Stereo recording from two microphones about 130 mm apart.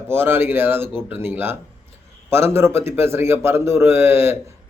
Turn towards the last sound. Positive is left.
turn(degrees=-20)  # may be behind; listen again after turning